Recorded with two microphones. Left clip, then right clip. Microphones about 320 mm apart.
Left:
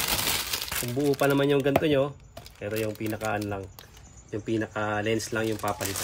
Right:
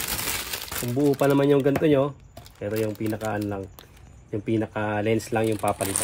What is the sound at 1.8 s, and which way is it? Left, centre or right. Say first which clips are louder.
Speech: right 3 dB; centre.